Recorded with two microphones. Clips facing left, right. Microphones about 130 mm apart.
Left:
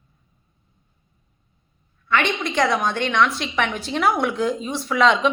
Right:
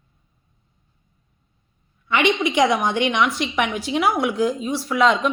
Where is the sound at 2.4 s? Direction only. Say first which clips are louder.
Right 2 dB; 15° right (ahead or behind).